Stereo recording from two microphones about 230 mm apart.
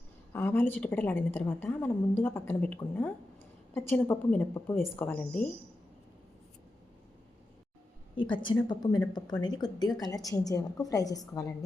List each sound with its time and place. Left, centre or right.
0.3 s a woman's voice: centre
8.1 s a woman's voice: left